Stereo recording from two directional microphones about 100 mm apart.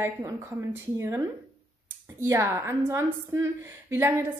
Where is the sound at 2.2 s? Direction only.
30° right (ahead or behind).